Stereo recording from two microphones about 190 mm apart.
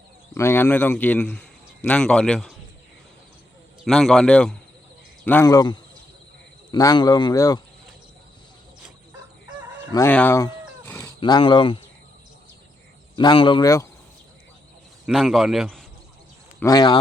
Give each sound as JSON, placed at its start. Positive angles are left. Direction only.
{"t": 0.3, "sound": "speech", "side_deg": 10}
{"t": 3.8, "sound": "a man's voice", "side_deg": 0}
{"t": 9.9, "sound": "a sound", "side_deg": 10}
{"t": 11.2, "sound": "speech", "side_deg": 25}
{"t": 13.1, "sound": "speech", "side_deg": 25}
{"t": 15.0, "sound": "a man's voice", "side_deg": 0}
{"t": 16.6, "sound": "speech", "side_deg": 20}